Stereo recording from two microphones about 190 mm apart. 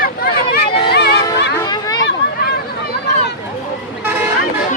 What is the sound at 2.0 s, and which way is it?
Chatter, 55° left (ahead or behind).